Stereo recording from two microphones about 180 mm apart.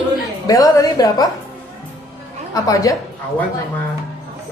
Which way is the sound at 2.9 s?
20° left (ahead or behind).